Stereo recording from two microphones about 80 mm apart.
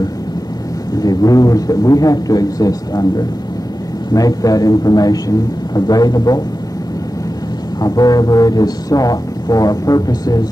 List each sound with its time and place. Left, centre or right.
0.9 s speech: left
7.8 s speech: left